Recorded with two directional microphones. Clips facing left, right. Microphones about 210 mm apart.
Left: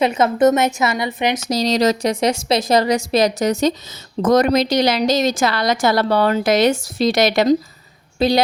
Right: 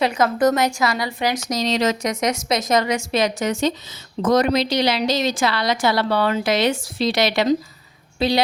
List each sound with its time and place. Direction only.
0.0 s a woman's voice: 25° left (ahead or behind)
1.5 s a woman's voice: 35° left (ahead or behind)